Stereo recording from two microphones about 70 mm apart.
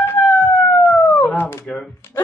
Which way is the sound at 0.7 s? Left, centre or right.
Left.